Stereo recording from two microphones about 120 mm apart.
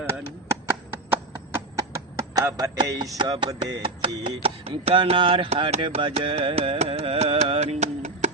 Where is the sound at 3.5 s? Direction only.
30° right (ahead or behind).